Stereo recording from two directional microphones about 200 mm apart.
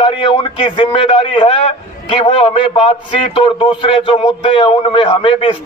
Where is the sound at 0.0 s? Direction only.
25° left (ahead or behind).